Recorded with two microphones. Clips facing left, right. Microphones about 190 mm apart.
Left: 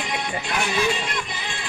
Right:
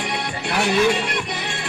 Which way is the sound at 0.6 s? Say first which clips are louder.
Right 7 dB; 65° right (ahead or behind).